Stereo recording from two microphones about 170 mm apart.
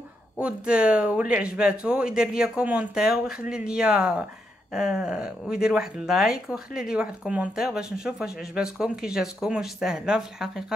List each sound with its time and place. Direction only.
0.4 s speech: 5° right (ahead or behind)